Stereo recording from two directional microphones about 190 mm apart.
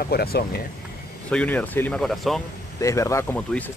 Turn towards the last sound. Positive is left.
turn(degrees=10)  # may be behind; listen again after turning